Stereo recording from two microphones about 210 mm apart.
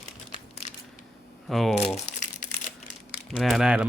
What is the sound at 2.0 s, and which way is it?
Crumpling, 35° left (ahead or behind).